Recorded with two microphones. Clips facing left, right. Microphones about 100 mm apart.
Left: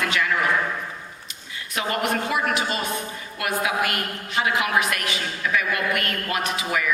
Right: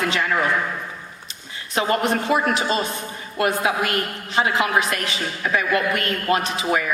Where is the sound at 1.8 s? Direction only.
30° right (ahead or behind).